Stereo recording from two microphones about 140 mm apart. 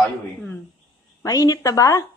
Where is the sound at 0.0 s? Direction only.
10° left (ahead or behind).